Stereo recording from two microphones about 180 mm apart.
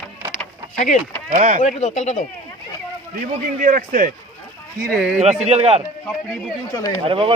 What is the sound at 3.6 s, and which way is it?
Speech, 50° right (ahead or behind).